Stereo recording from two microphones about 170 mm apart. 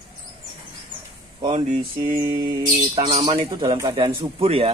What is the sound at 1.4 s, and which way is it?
Speech, 40° right (ahead or behind).